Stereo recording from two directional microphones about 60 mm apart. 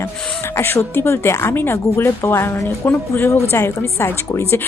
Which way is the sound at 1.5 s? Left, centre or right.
Left.